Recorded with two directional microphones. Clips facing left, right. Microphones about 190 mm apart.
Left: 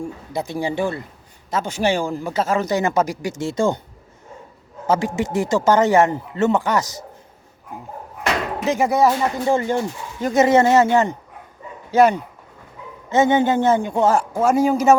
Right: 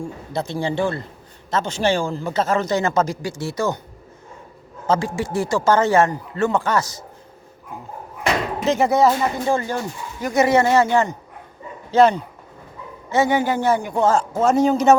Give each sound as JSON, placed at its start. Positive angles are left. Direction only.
{"t": 0.3, "sound": "speech", "side_deg": 15}
{"t": 4.9, "sound": "speech", "side_deg": 20}
{"t": 8.6, "sound": "speech", "side_deg": 15}